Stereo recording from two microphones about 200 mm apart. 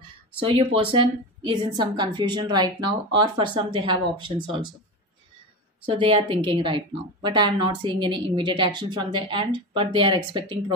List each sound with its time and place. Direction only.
0.4 s a woman's voice: 25° right (ahead or behind)
5.9 s a woman's voice: 25° right (ahead or behind)